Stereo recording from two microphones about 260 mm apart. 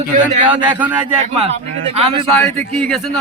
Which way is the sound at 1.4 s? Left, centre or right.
Right.